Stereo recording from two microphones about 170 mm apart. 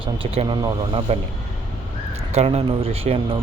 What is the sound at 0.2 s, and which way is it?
Speech, 30° right (ahead or behind).